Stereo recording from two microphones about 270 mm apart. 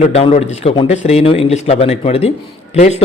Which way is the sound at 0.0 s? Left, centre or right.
Left.